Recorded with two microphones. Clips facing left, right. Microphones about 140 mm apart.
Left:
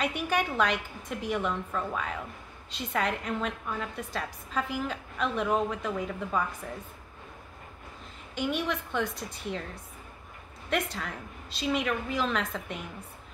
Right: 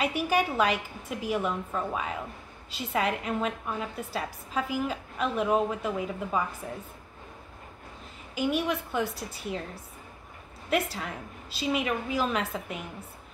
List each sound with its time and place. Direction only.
0.0 s a woman's voice: 5° right (ahead or behind)
8.4 s a woman's voice: 5° right (ahead or behind)
10.7 s a woman's voice: 5° right (ahead or behind)